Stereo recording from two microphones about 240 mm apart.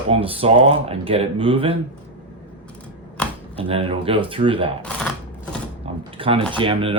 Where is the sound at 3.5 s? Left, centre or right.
Right.